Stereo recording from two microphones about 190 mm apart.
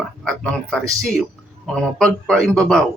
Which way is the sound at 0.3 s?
5° left (ahead or behind).